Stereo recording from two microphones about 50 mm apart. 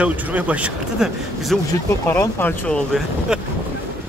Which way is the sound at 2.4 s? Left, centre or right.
Left.